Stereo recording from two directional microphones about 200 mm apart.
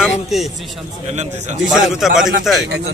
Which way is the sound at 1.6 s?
Centre (ahead or behind).